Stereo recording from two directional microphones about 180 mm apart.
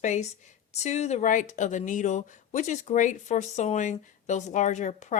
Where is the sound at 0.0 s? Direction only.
40° left (ahead or behind).